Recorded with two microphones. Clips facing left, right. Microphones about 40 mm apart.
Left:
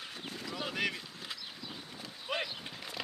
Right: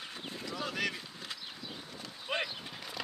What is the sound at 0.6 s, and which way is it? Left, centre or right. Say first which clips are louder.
Boat: even; centre.